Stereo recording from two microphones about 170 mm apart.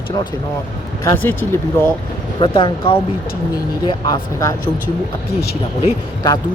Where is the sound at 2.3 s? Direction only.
30° left (ahead or behind).